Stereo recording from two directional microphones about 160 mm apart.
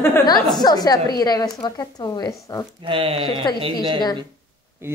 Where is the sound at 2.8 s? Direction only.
35° right (ahead or behind).